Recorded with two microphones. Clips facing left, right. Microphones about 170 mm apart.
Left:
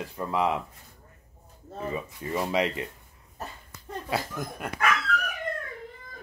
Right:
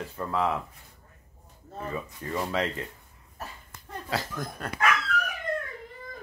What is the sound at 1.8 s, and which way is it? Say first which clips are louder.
Speech: left 2 dB; 15° left (ahead or behind).